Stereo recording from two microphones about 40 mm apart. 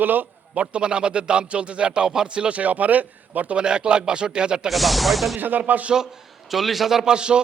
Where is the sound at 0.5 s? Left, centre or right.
Right.